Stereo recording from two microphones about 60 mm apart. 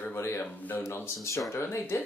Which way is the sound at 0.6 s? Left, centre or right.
Left.